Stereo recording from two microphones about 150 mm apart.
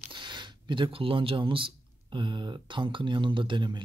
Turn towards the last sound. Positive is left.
turn(degrees=-35)  # may be behind; listen again after turning